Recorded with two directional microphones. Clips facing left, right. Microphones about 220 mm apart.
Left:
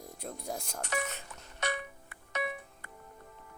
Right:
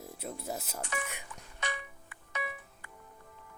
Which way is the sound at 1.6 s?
60° left (ahead or behind).